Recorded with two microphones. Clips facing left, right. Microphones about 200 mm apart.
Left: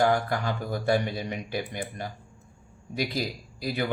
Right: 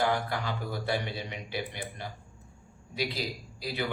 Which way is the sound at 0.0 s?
45° left (ahead or behind).